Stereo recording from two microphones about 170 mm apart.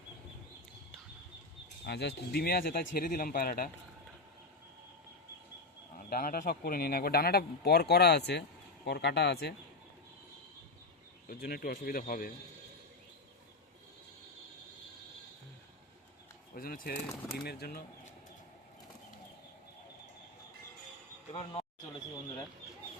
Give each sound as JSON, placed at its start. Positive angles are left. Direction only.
{"t": 1.8, "sound": "speech", "side_deg": 75}
{"t": 6.1, "sound": "speech", "side_deg": 60}
{"t": 11.3, "sound": "speech", "side_deg": 65}
{"t": 16.6, "sound": "speech", "side_deg": 60}
{"t": 21.3, "sound": "speech", "side_deg": 35}